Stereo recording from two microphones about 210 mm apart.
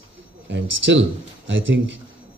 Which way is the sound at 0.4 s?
60° right (ahead or behind).